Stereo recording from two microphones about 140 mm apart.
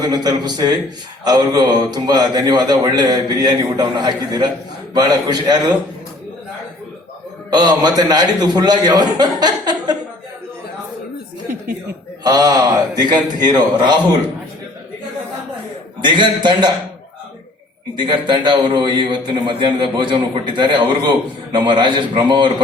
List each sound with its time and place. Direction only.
0.0 s speech: 30° right (ahead or behind)
7.5 s speech: 30° right (ahead or behind)
12.2 s speech: 30° right (ahead or behind)
16.0 s a man's voice: 35° right (ahead or behind)
17.9 s a man's voice: 35° right (ahead or behind)